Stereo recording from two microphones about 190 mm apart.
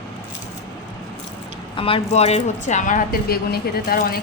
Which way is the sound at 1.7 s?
30° left (ahead or behind).